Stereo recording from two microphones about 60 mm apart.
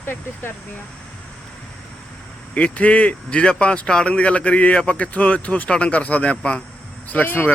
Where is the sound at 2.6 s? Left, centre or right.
Left.